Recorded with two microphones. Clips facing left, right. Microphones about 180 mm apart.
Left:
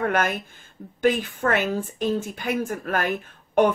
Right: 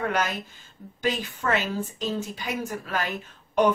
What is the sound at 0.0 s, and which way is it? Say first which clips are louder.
Speech: left 3 dB; 50° left (ahead or behind).